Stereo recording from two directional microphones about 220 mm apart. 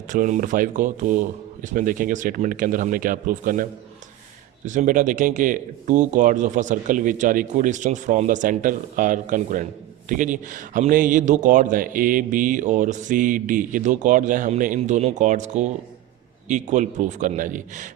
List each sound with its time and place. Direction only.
0.1 s speech: 35° right (ahead or behind)